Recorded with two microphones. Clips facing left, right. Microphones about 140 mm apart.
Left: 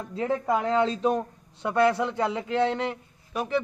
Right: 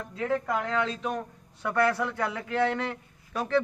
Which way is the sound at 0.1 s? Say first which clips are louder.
Left 3 dB; 25° left (ahead or behind).